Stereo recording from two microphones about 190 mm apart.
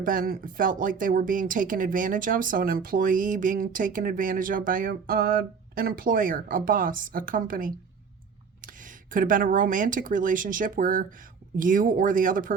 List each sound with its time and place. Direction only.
0.0 s speech: 45° right (ahead or behind)